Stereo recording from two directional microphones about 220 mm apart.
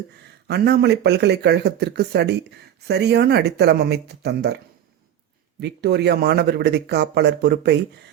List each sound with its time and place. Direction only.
0.4 s speech: 50° right (ahead or behind)
5.5 s speech: 50° right (ahead or behind)